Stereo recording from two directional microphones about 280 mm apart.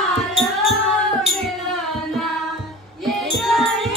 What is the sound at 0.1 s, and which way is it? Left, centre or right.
Music, centre.